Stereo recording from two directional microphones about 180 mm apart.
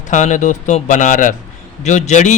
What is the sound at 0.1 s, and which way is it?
Speech, 40° left (ahead or behind).